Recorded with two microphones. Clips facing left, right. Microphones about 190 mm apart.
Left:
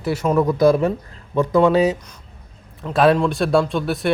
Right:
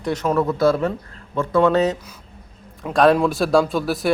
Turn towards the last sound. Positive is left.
turn(degrees=0)  # may be behind; listen again after turning